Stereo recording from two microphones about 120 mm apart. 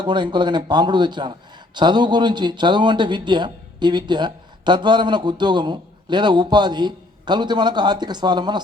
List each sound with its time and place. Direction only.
0.0 s a man's voice: 40° right (ahead or behind)